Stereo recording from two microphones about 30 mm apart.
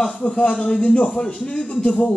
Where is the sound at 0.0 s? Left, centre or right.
Left.